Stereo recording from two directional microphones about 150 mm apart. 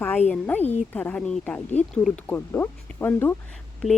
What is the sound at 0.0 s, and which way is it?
Speech, 10° left (ahead or behind).